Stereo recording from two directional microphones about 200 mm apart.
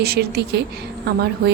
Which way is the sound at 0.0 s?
55° right (ahead or behind).